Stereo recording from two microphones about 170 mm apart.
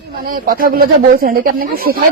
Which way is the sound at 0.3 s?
55° right (ahead or behind).